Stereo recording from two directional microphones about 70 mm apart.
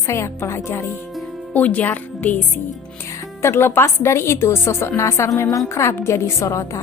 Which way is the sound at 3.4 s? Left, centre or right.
Left.